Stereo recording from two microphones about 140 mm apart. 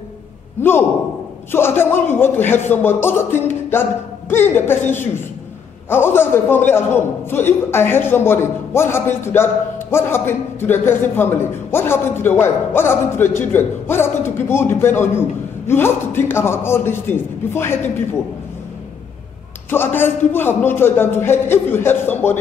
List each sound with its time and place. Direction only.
0.6 s a man's voice: 15° left (ahead or behind)
19.7 s a man's voice: 15° left (ahead or behind)